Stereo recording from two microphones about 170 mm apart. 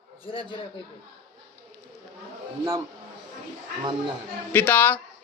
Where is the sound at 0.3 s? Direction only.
30° left (ahead or behind).